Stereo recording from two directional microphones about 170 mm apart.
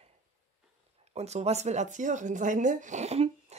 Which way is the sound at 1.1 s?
40° right (ahead or behind).